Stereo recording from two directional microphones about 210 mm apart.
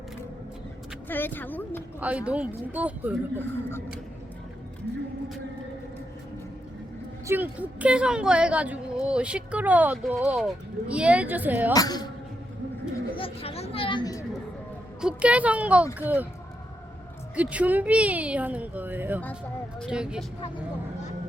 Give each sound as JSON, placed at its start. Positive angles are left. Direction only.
{"t": 1.0, "sound": "a woman's voice", "side_deg": 10}
{"t": 2.0, "sound": "speech", "side_deg": -5}
{"t": 3.3, "sound": "a woman's voice", "side_deg": 10}
{"t": 7.3, "sound": "speech", "side_deg": -10}
{"t": 11.7, "sound": "a woman's voice", "side_deg": 20}
{"t": 13.1, "sound": "a sound", "side_deg": 25}
{"t": 15.0, "sound": "speech", "side_deg": -5}
{"t": 17.3, "sound": "speech", "side_deg": -5}